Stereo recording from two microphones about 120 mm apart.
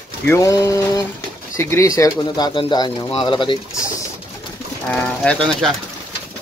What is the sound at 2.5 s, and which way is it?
Speech, 40° left (ahead or behind).